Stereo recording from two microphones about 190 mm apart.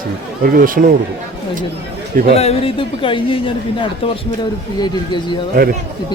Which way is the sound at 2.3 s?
30° left (ahead or behind).